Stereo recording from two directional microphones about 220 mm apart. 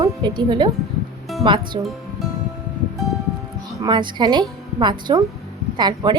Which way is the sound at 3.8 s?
20° right (ahead or behind).